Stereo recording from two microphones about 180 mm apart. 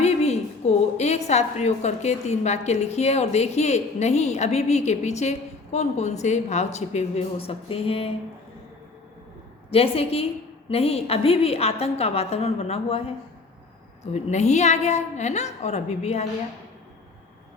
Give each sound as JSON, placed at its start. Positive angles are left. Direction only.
{"t": 0.0, "sound": "a woman's voice", "side_deg": 35}
{"t": 9.6, "sound": "a woman's voice", "side_deg": 35}